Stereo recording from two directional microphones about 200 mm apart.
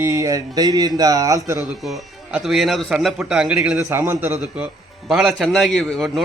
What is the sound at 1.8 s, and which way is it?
A man's voice, centre (ahead or behind).